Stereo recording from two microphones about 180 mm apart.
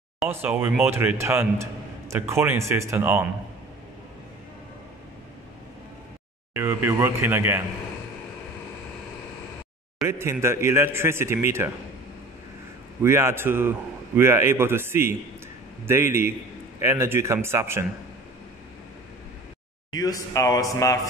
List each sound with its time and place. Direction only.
0.2 s a man's voice: 10° right (ahead or behind)
6.5 s a man's voice: 15° right (ahead or behind)
10.0 s a man's voice: 15° right (ahead or behind)
13.0 s a man's voice: 15° right (ahead or behind)
19.9 s speech: 20° left (ahead or behind)